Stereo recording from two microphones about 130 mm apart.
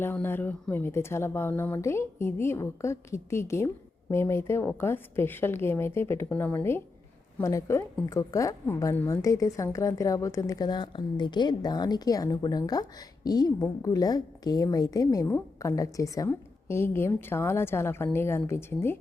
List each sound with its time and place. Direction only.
0.0 s a woman's voice: 15° left (ahead or behind)